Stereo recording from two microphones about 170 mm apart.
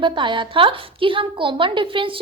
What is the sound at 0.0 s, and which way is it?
A woman's voice, 30° right (ahead or behind).